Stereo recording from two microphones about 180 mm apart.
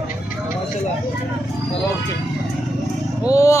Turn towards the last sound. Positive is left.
turn(degrees=15)  # may be behind; listen again after turning